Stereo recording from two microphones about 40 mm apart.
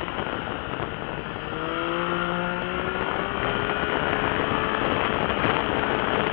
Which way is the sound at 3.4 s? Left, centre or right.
Centre.